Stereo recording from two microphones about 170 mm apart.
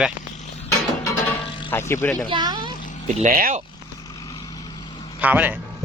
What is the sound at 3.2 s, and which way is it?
Speech, 50° right (ahead or behind).